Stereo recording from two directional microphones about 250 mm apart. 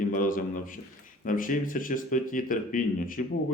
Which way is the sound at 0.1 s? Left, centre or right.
Left.